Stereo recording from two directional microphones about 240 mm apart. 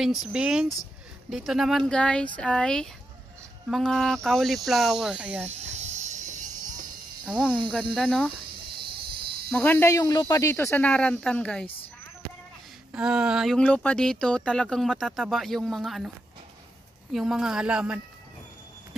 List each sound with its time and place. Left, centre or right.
0.0 s speech: centre
5.7 s music: right
7.2 s speech: centre
9.5 s speech: centre
12.9 s speech: centre
17.1 s speech: centre